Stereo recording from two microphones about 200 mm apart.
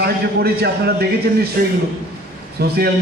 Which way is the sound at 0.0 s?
55° right (ahead or behind).